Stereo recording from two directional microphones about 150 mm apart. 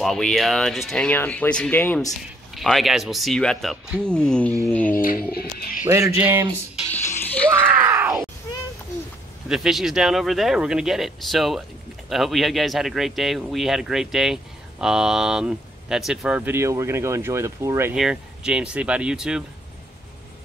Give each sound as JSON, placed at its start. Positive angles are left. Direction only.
{"t": 0.0, "sound": "speech", "side_deg": 5}
{"t": 2.5, "sound": "speech", "side_deg": 0}
{"t": 4.6, "sound": "a sound", "side_deg": 10}
{"t": 4.9, "sound": "a sound", "side_deg": 70}
{"t": 5.3, "sound": "a sound", "side_deg": 90}
{"t": 5.9, "sound": "speech", "side_deg": -20}
{"t": 6.9, "sound": "music", "side_deg": 15}
{"t": 7.7, "sound": "groan", "side_deg": -15}
{"t": 9.5, "sound": "speech", "side_deg": -5}
{"t": 17.9, "sound": "speech", "side_deg": -5}